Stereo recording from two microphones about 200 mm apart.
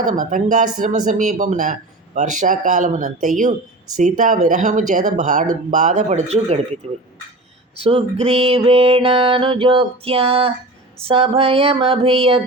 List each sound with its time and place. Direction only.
0.1 s speech: 40° right (ahead or behind)
7.8 s music: 30° right (ahead or behind)